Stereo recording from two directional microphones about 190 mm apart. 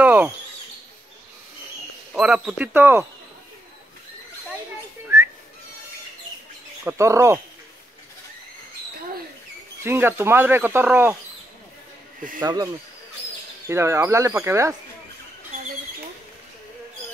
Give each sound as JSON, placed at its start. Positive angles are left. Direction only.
{"t": 0.0, "sound": "a sound", "side_deg": -10}
{"t": 2.1, "sound": "speech", "side_deg": -5}
{"t": 6.8, "sound": "speech", "side_deg": -15}
{"t": 9.8, "sound": "speech", "side_deg": -10}
{"t": 12.4, "sound": "speech", "side_deg": -20}
{"t": 13.7, "sound": "speech", "side_deg": -15}